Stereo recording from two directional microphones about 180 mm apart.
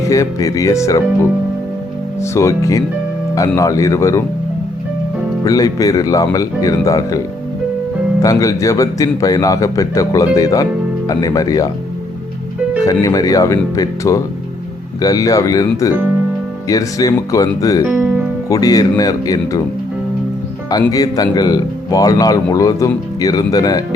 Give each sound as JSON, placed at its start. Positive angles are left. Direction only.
{"t": 0.0, "sound": "speech", "side_deg": 15}
{"t": 2.2, "sound": "speech", "side_deg": 15}
{"t": 5.5, "sound": "a man's voice", "side_deg": 20}
{"t": 8.2, "sound": "a man's voice", "side_deg": 20}
{"t": 12.8, "sound": "a man's voice", "side_deg": 20}
{"t": 17.8, "sound": "speech", "side_deg": -10}
{"t": 18.4, "sound": "a man's voice", "side_deg": 20}
{"t": 20.8, "sound": "a man's voice", "side_deg": 20}